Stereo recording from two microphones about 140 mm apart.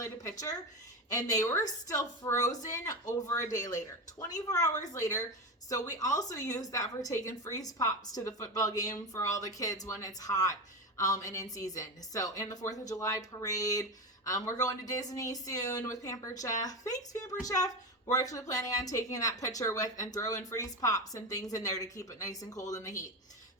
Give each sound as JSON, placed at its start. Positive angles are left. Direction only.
{"t": 0.0, "sound": "a woman's voice", "side_deg": 25}
{"t": 2.5, "sound": "a woman's voice", "side_deg": 60}
{"t": 2.7, "sound": "a woman's voice", "side_deg": 25}